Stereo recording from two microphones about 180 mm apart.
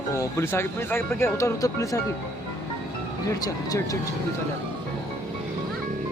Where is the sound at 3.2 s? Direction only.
20° left (ahead or behind).